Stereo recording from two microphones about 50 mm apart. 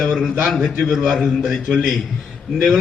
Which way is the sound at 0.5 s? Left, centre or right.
Centre.